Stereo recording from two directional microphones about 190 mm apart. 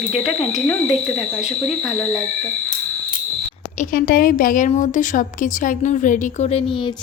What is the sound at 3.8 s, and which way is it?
A woman's voice, 50° left (ahead or behind).